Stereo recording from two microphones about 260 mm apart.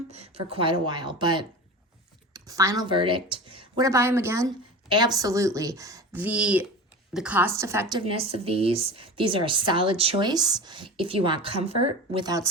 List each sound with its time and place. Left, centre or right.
0.1 s a woman's voice: right